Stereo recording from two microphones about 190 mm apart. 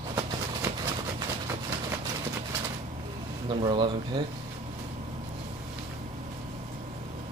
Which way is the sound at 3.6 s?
25° right (ahead or behind).